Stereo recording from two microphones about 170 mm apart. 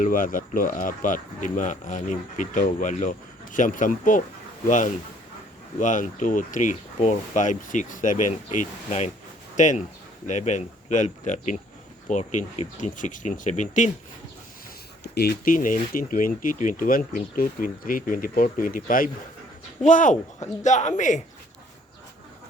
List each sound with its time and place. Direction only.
0.0 s speech: 50° left (ahead or behind)
15.0 s speech: 70° left (ahead or behind); by 21.2 s 45° left (ahead or behind)